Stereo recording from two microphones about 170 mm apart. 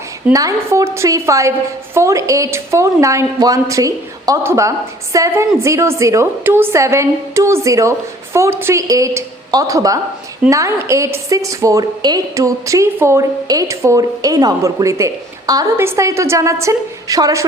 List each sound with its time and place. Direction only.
0.3 s a woman's voice: 20° right (ahead or behind)